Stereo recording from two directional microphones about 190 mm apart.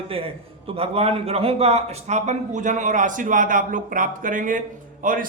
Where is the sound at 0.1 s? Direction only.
30° right (ahead or behind).